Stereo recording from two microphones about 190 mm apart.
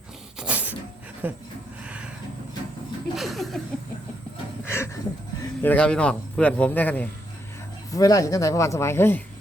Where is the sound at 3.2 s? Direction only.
Centre (ahead or behind).